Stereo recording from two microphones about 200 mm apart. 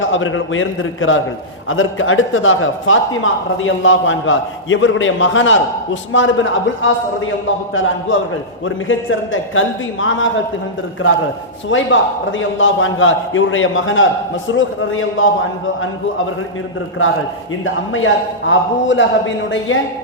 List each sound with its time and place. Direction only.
0.0 s a man's voice: 75° left (ahead or behind)
11.7 s a man's voice: 70° left (ahead or behind); by 15.3 s 85° left
17.9 s speech: 75° left (ahead or behind)